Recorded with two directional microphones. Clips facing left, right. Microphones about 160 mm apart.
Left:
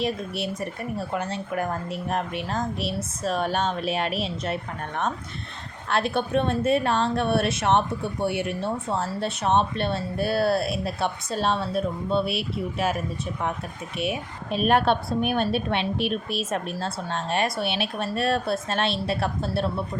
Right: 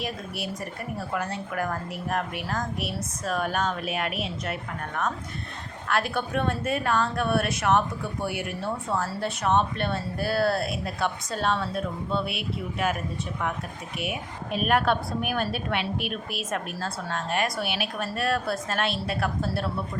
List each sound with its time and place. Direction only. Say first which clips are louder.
0.0 s a woman's voice: left 5 dB; 25° left (ahead or behind)
14.0 s a woman's voice: left 4 dB; 30° left (ahead or behind)